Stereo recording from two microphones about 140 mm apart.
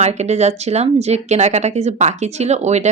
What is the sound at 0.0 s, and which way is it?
Speech, 50° right (ahead or behind).